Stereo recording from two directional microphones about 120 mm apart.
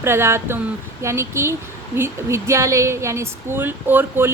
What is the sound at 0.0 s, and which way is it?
A woman's voice, 20° right (ahead or behind).